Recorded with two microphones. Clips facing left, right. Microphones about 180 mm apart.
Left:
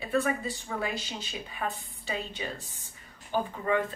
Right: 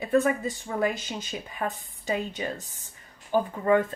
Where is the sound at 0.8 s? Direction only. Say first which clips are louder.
Right 9 dB; 45° right (ahead or behind).